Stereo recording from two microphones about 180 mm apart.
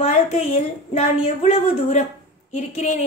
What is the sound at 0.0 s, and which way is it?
A woman's voice, 35° left (ahead or behind).